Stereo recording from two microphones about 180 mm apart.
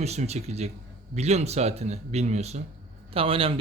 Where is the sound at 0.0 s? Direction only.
35° right (ahead or behind).